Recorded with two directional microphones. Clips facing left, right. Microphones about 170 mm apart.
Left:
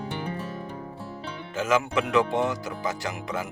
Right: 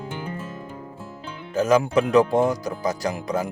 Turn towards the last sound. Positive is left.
turn(degrees=-40)  # may be behind; listen again after turning